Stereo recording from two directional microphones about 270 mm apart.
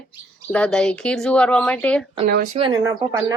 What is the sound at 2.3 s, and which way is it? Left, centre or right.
Speech, right.